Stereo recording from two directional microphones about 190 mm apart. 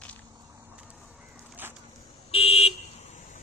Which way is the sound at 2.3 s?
30° left (ahead or behind).